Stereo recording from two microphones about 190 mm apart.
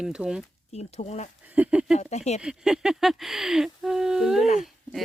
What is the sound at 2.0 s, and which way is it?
Speech, 35° left (ahead or behind).